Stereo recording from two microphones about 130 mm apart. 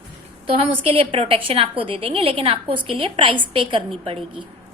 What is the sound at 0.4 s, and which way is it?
A woman's voice, 45° right (ahead or behind).